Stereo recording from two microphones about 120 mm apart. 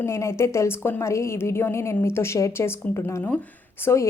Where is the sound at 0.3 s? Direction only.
25° left (ahead or behind).